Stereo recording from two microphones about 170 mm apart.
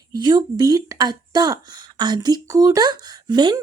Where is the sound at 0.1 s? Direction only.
25° right (ahead or behind).